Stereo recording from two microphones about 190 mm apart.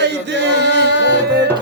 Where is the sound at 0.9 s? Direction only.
65° left (ahead or behind).